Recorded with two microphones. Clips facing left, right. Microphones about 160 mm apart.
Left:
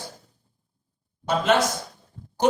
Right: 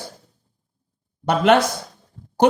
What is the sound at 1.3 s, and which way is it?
Speech, 65° right (ahead or behind).